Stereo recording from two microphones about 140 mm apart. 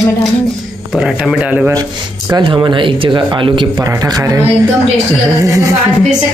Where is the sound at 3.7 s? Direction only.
20° right (ahead or behind).